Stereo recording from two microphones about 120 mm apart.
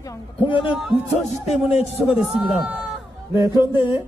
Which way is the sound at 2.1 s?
5° right (ahead or behind).